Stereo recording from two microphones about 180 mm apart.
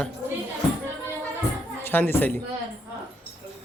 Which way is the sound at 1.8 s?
10° left (ahead or behind).